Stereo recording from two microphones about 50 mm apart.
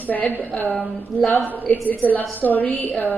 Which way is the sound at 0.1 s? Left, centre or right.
Left.